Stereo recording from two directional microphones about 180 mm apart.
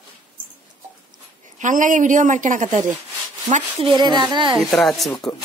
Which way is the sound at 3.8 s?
25° right (ahead or behind).